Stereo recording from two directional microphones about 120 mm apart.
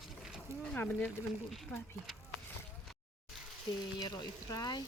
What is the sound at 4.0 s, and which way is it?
Speech, 35° left (ahead or behind).